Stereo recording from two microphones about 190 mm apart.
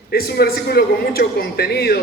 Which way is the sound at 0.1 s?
55° left (ahead or behind).